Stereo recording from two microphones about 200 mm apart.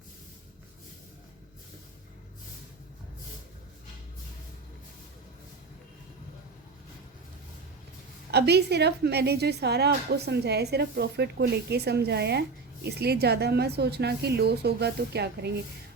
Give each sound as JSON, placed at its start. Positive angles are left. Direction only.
{"t": 8.3, "sound": "a woman's voice", "side_deg": -55}